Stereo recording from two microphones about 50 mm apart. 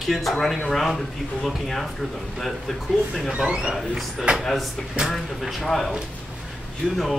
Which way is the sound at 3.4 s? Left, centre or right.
Centre.